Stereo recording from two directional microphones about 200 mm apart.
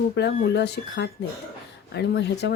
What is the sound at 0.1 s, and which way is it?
Speech, 60° left (ahead or behind).